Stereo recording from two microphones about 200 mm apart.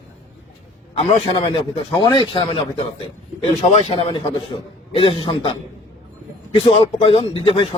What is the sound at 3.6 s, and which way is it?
A man's voice, 30° left (ahead or behind).